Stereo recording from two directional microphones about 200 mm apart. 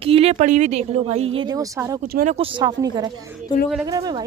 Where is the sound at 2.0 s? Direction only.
50° right (ahead or behind).